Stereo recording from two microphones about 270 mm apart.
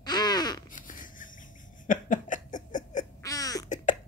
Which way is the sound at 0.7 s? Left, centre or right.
Left.